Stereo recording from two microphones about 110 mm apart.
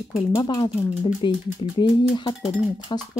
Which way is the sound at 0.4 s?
45° left (ahead or behind).